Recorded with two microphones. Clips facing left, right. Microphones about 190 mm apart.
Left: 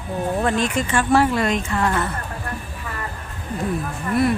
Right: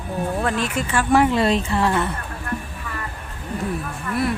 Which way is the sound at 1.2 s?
20° right (ahead or behind).